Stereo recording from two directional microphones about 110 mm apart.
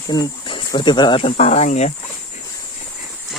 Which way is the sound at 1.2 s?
70° left (ahead or behind).